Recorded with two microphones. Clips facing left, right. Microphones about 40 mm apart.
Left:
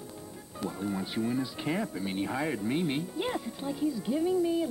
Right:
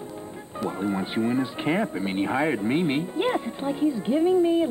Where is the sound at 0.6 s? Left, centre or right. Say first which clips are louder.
Right 7 dB; right.